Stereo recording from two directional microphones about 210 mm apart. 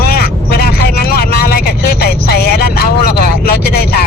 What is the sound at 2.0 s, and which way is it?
Vehicle, 50° left (ahead or behind).